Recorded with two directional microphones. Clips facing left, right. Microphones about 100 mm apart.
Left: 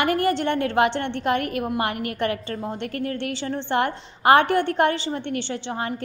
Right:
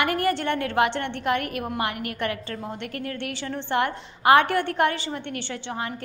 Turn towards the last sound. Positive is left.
turn(degrees=30)  # may be behind; listen again after turning